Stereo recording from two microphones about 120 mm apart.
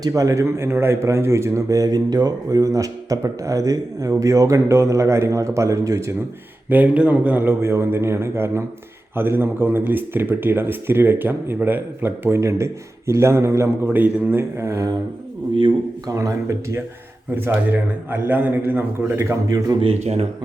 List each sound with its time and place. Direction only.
0.0 s speech: 25° right (ahead or behind)
6.7 s speech: 10° right (ahead or behind)
16.0 s speech: 30° right (ahead or behind)
17.3 s speech: 15° right (ahead or behind)
19.8 s speech: 60° right (ahead or behind)